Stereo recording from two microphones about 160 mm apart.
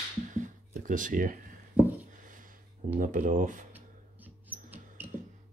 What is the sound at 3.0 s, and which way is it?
Speech, 55° right (ahead or behind).